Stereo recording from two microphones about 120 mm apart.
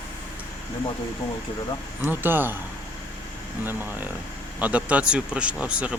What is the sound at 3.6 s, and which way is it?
Speech, 15° right (ahead or behind).